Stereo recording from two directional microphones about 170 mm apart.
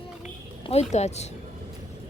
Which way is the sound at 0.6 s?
40° left (ahead or behind).